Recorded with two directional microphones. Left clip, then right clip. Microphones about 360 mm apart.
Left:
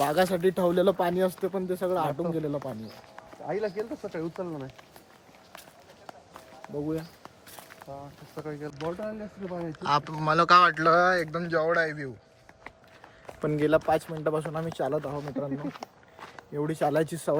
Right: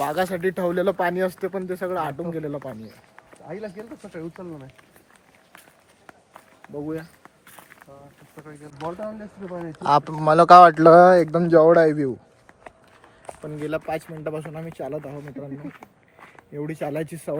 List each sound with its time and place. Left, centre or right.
0.0 s speech: centre
4.1 s speech: left
6.1 s walk: centre
8.7 s speech: centre
13.7 s speech: centre